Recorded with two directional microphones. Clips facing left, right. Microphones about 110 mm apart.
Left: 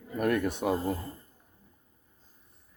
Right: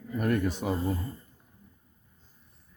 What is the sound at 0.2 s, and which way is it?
Speech, 55° left (ahead or behind).